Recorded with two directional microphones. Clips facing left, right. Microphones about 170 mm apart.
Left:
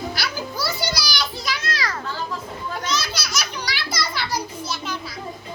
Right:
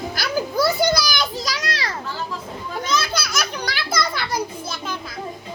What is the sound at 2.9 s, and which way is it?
Children playing, 55° right (ahead or behind).